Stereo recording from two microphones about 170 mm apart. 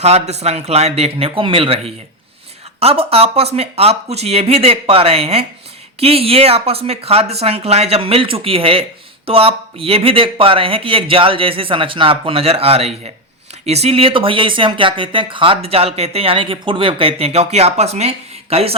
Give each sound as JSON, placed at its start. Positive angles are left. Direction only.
{"t": 0.0, "sound": "speech", "side_deg": -40}